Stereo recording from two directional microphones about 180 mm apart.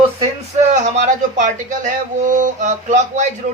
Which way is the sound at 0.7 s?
45° right (ahead or behind).